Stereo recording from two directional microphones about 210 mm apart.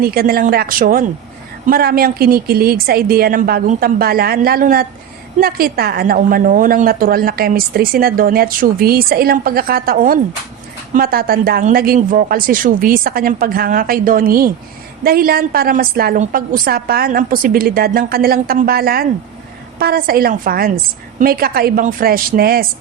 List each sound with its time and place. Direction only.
0.0 s a woman's voice: 45° right (ahead or behind)